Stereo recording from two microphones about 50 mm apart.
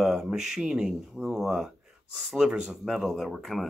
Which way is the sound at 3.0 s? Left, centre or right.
Centre.